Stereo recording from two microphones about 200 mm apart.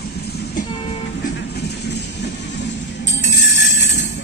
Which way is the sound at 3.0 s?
60° left (ahead or behind).